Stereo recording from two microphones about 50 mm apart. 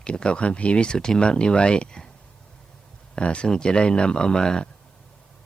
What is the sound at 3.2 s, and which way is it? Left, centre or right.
Speech, left.